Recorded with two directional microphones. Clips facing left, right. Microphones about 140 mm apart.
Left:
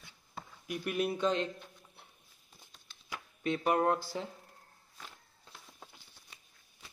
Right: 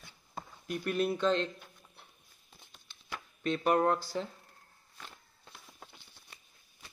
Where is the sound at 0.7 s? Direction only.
10° left (ahead or behind).